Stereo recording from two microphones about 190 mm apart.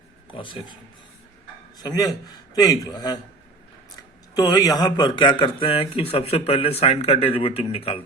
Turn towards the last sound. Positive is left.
turn(degrees=30)  # may be behind; listen again after turning